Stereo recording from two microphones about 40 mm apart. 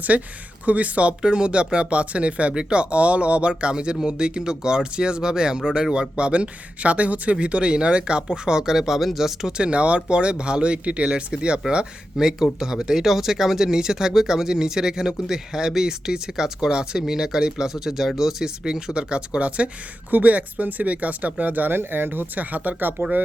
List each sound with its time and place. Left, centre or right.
0.1 s speech: right
1.2 s speech: right; by 9.5 s centre
9.5 s speech: right
12.1 s speech: centre; by 19.7 s right
20.1 s speech: right
21.8 s speech: right